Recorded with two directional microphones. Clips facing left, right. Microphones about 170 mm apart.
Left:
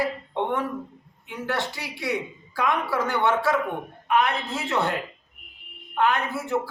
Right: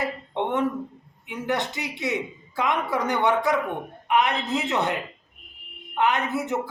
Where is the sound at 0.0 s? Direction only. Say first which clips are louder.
Left 1 dB; 20° right (ahead or behind).